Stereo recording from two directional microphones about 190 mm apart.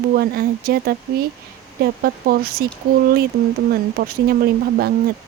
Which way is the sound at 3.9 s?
55° right (ahead or behind).